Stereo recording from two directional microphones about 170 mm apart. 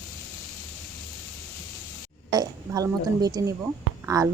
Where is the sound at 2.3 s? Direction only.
20° right (ahead or behind).